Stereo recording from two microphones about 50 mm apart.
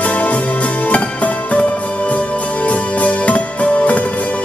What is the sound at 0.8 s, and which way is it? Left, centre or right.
Music, left.